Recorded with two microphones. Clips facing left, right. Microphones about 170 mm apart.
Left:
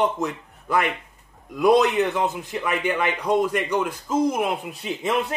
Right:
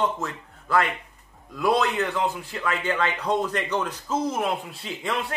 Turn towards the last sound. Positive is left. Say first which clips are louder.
# left 5 dB
turn(degrees=20)  # may be behind; listen again after turning